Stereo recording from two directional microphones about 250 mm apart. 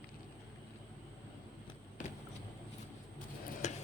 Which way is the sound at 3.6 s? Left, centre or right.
Left.